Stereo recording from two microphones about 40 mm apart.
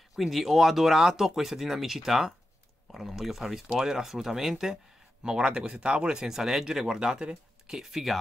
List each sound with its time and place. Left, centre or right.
0.1 s speech: centre